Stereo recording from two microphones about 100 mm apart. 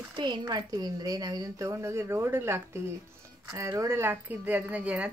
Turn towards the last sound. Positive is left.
turn(degrees=-15)  # may be behind; listen again after turning